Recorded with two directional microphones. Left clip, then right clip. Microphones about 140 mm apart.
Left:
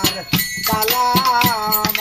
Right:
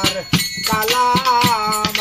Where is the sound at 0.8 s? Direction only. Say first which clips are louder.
Right 2 dB; 30° left (ahead or behind).